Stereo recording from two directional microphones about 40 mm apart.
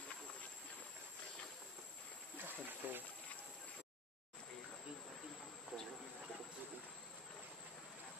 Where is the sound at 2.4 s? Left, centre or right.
Right.